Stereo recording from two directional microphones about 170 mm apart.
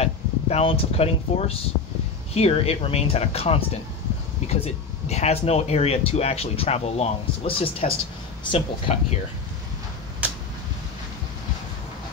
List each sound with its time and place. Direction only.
0.0 s speech: 35° left (ahead or behind)